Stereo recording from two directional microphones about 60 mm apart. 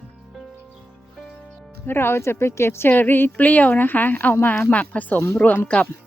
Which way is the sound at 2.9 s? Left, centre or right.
Left.